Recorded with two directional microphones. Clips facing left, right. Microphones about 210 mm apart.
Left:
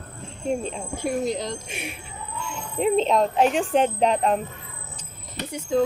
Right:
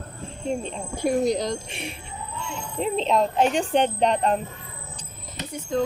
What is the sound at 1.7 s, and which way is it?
Speech, 5° left (ahead or behind).